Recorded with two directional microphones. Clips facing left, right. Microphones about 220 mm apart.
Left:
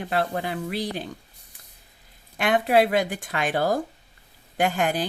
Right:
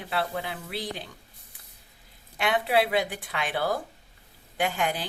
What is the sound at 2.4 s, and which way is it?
Speech, 45° left (ahead or behind).